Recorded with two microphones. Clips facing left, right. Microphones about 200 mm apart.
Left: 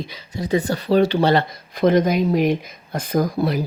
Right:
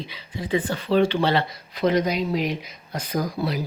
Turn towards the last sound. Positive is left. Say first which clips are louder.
# left 6 dB
turn(degrees=50)  # may be behind; listen again after turning